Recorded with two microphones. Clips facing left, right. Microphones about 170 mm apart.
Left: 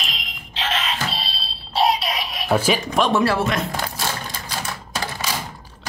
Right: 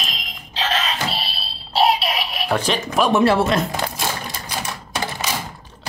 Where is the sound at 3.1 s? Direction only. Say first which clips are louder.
Right 6 dB; 25° right (ahead or behind).